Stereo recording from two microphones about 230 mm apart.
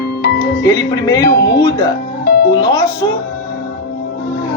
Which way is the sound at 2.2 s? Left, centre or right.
Left.